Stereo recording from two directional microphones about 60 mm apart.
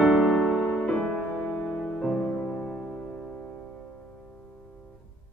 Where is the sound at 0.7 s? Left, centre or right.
Centre.